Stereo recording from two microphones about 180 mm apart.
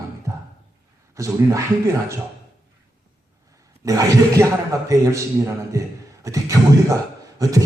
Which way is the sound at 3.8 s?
20° right (ahead or behind).